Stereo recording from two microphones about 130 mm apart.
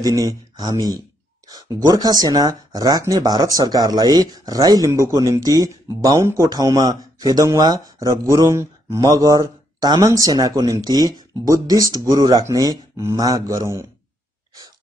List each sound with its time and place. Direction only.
0.0 s speech: 25° right (ahead or behind)